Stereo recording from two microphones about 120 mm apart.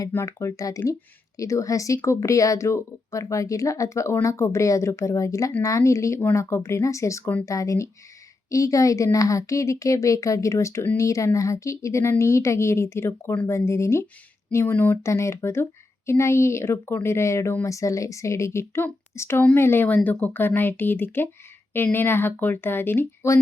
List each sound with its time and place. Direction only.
0.1 s speech: 25° left (ahead or behind)